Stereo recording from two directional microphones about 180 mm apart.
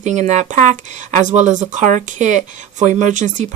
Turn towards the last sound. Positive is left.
turn(degrees=-45)  # may be behind; listen again after turning